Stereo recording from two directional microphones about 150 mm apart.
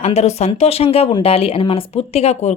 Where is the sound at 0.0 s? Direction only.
45° left (ahead or behind).